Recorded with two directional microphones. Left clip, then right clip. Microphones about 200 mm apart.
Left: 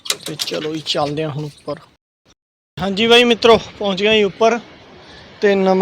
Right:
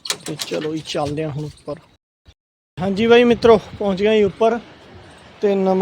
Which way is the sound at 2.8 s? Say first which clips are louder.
Left 1 dB; 20° right (ahead or behind).